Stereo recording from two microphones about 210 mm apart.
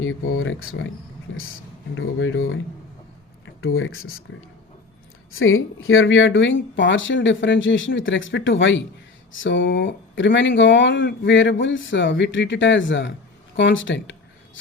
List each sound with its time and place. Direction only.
0.0 s speech: 75° left (ahead or behind)
2.0 s speech: 70° left (ahead or behind)
5.3 s speech: 75° left (ahead or behind)
13.6 s a sound: 60° left (ahead or behind)